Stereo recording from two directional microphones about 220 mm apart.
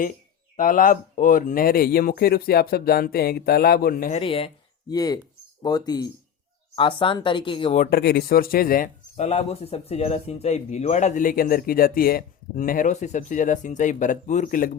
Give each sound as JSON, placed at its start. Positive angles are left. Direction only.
{"t": 0.5, "sound": "speech", "side_deg": 40}
{"t": 4.2, "sound": "speech", "side_deg": 25}
{"t": 7.8, "sound": "speech", "side_deg": 45}